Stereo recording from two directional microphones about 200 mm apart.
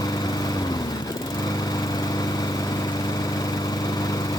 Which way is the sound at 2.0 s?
20° left (ahead or behind).